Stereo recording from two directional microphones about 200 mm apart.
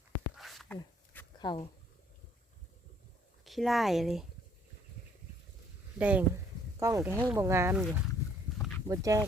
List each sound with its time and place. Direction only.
0.3 s a sound: centre (ahead or behind)
3.4 s speech: centre (ahead or behind)
6.0 s speech: 5° right (ahead or behind)
7.8 s speech: centre (ahead or behind)
8.9 s speech: 15° right (ahead or behind)